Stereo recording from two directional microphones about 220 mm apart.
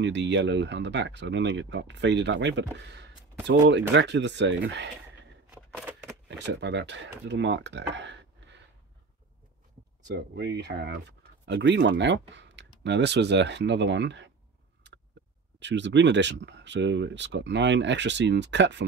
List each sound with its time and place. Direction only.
0.0 s speech: 55° right (ahead or behind)
5.5 s a sound: 5° right (ahead or behind)
6.2 s speech: 50° right (ahead or behind)
10.1 s speech: 50° right (ahead or behind)
14.8 s a sound: 55° right (ahead or behind)
15.6 s speech: 55° right (ahead or behind)